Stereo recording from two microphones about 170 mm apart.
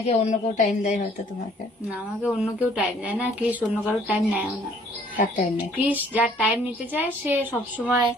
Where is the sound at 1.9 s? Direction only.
5° right (ahead or behind).